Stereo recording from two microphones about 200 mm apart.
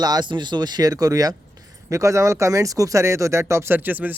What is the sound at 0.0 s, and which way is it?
Speech, 20° right (ahead or behind).